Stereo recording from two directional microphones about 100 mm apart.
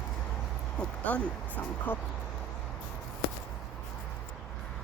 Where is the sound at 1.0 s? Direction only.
15° left (ahead or behind).